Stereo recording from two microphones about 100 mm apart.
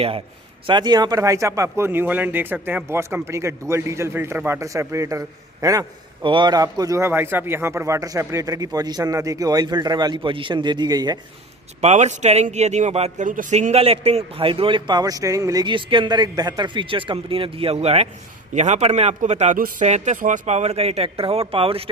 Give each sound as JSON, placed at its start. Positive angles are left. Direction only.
{"t": 0.7, "sound": "speech", "side_deg": -45}
{"t": 6.2, "sound": "speech", "side_deg": -55}
{"t": 7.0, "sound": "speech", "side_deg": -20}
{"t": 11.8, "sound": "speech", "side_deg": -90}
{"t": 13.7, "sound": "a man's voice", "side_deg": -80}
{"t": 15.6, "sound": "a man's voice", "side_deg": -55}